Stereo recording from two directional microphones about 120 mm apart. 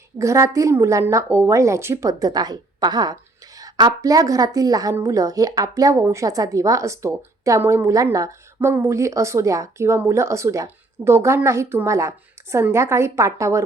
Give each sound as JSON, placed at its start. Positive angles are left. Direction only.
{"t": 0.2, "sound": "a woman's voice", "side_deg": -25}